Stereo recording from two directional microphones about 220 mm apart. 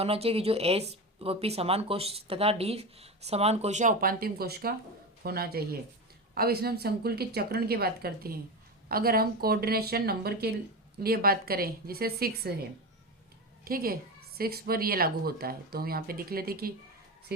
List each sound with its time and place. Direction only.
0.0 s a woman's voice: 25° right (ahead or behind); by 12.5 s 45° right (ahead or behind)
13.7 s a woman's voice: 40° right (ahead or behind)